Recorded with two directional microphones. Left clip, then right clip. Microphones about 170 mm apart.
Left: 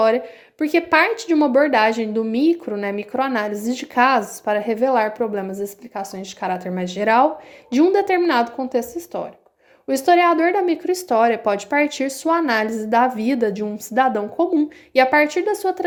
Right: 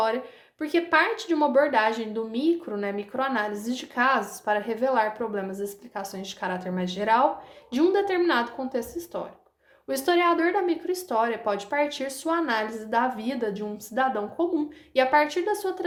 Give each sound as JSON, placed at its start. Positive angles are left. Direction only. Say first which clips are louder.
{"t": 0.6, "sound": "a woman's voice", "louder": "left 6 dB", "side_deg": 45}